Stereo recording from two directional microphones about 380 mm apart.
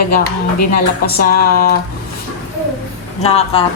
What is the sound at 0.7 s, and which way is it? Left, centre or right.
Speech, left.